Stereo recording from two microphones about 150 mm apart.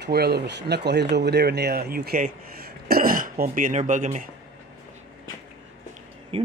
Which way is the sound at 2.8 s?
75° right (ahead or behind).